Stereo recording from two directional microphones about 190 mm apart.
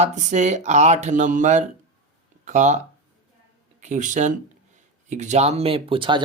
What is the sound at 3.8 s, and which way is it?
Speech, 40° right (ahead or behind).